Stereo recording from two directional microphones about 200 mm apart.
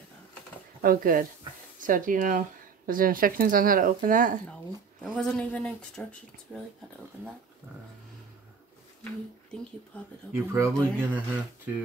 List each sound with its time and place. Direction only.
0.8 s speech: 45° right (ahead or behind)
5.0 s speech: 5° left (ahead or behind)
10.3 s speech: 15° right (ahead or behind)